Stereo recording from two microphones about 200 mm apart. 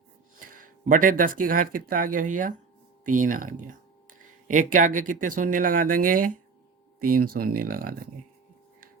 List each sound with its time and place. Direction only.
0.3 s speech: 45° right (ahead or behind)